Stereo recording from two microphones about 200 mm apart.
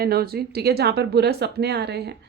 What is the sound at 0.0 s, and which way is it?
Speech, 50° right (ahead or behind).